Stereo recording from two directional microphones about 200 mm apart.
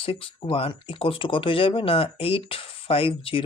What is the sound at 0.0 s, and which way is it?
Speech, 25° left (ahead or behind).